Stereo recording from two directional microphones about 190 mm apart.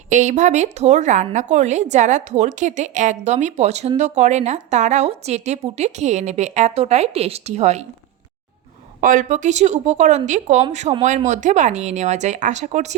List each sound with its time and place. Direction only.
0.1 s a woman's voice: 40° right (ahead or behind)
9.0 s a woman's voice: 45° right (ahead or behind)